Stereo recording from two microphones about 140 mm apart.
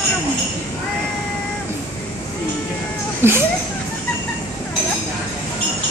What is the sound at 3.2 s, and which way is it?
Speech, 15° right (ahead or behind).